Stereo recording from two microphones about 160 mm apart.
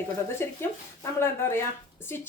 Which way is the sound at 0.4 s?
15° left (ahead or behind).